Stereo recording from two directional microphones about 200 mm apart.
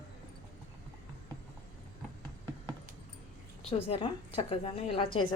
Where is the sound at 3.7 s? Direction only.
30° left (ahead or behind).